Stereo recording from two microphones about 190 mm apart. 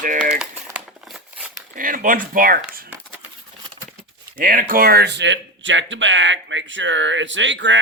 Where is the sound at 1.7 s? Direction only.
45° right (ahead or behind).